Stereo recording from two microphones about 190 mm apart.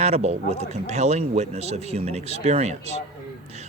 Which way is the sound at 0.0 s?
35° right (ahead or behind).